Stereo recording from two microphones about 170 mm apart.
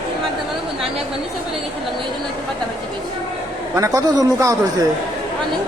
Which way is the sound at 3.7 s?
20° right (ahead or behind).